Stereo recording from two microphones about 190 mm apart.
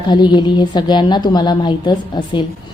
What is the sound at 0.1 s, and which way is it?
A woman's voice, 25° left (ahead or behind).